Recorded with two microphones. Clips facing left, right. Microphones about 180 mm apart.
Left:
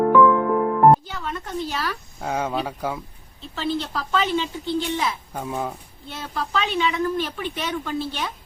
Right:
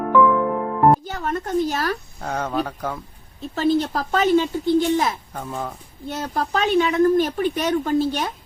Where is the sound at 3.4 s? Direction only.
45° right (ahead or behind).